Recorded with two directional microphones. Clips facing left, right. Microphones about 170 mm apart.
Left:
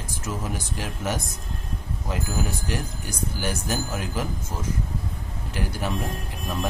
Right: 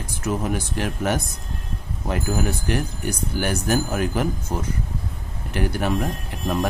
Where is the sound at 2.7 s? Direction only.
60° right (ahead or behind).